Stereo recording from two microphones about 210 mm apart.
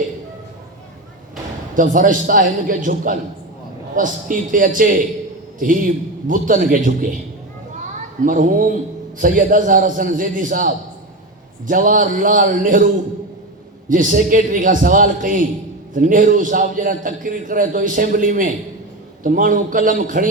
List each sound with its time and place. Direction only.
1.7 s a man's voice: 40° right (ahead or behind)
8.2 s a man's voice: 40° right (ahead or behind)
13.9 s a man's voice: 40° right (ahead or behind)